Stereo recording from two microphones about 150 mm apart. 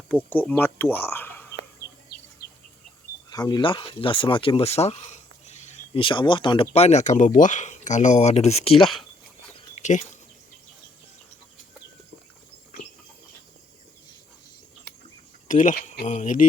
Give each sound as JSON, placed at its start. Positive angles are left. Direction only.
{"t": 0.1, "sound": "speech", "side_deg": 10}
{"t": 2.4, "sound": "bird", "side_deg": 90}
{"t": 3.2, "sound": "speech", "side_deg": 25}
{"t": 5.5, "sound": "a sound", "side_deg": 50}
{"t": 5.9, "sound": "speech", "side_deg": 35}
{"t": 6.7, "sound": "speech", "side_deg": 45}
{"t": 8.8, "sound": "speech", "side_deg": 0}
{"t": 9.8, "sound": "speech", "side_deg": 55}
{"t": 15.4, "sound": "speech", "side_deg": 60}